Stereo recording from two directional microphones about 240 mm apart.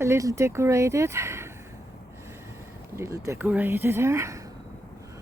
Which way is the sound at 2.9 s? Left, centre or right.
Centre.